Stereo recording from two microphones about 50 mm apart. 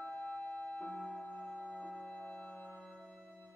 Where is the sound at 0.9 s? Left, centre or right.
Centre.